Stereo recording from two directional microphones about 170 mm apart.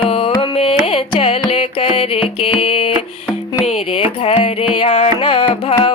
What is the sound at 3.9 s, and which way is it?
Carnatic music, 35° left (ahead or behind).